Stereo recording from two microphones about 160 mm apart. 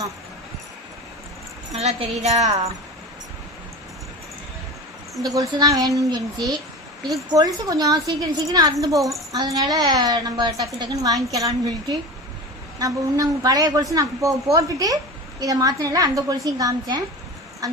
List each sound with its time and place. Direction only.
1.7 s a woman's voice: 40° right (ahead or behind)
5.2 s a woman's voice: 20° right (ahead or behind)